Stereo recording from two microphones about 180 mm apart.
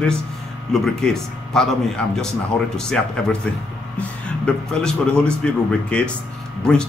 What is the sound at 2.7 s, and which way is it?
Speech, 5° left (ahead or behind).